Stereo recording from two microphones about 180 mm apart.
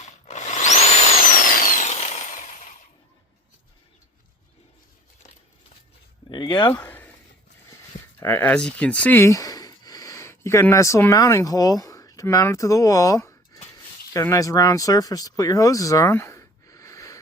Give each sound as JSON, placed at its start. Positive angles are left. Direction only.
{"t": 0.3, "sound": "wood", "side_deg": 40}
{"t": 1.3, "sound": "tools", "side_deg": 50}
{"t": 6.3, "sound": "speech", "side_deg": 25}
{"t": 6.8, "sound": "a sound", "side_deg": 10}
{"t": 8.2, "sound": "speech", "side_deg": 10}